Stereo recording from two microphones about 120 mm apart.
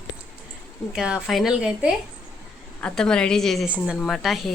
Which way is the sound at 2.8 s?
5° left (ahead or behind).